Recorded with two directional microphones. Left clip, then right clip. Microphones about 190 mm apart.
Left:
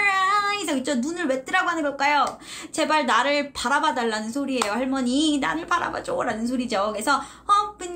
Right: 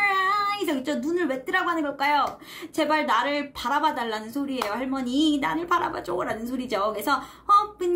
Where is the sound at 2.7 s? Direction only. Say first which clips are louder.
Left 2 dB; 15° left (ahead or behind).